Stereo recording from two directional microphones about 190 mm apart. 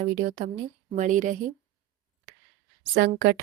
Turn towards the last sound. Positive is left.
turn(degrees=-55)  # may be behind; listen again after turning